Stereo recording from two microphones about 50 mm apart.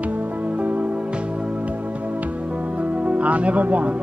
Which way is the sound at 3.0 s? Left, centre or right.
Right.